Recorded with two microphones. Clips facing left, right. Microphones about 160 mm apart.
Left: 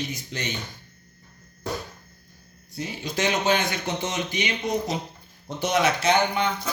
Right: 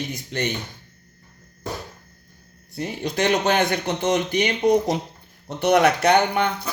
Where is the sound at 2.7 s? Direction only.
60° right (ahead or behind).